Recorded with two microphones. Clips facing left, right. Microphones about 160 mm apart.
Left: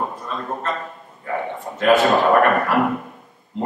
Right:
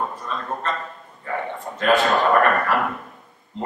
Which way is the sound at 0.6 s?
5° left (ahead or behind).